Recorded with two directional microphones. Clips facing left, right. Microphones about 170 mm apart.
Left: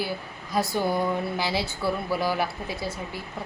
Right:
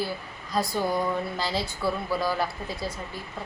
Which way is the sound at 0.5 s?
5° left (ahead or behind).